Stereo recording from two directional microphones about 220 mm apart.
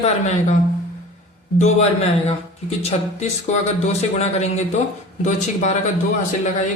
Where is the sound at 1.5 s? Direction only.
30° left (ahead or behind).